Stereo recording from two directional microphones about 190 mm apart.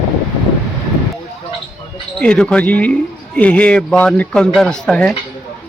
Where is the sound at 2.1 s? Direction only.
5° left (ahead or behind).